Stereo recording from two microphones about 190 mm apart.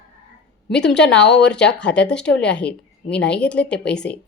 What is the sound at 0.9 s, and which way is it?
Speech, 5° left (ahead or behind).